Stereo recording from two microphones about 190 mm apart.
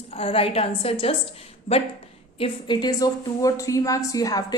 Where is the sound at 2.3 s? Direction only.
25° left (ahead or behind).